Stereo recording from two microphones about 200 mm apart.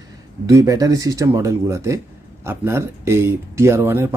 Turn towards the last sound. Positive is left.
turn(degrees=-10)  # may be behind; listen again after turning